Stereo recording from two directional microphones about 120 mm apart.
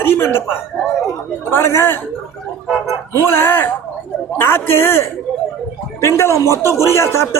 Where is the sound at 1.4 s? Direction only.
20° left (ahead or behind).